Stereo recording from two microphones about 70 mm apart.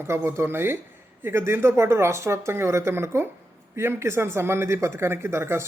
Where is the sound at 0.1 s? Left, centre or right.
Right.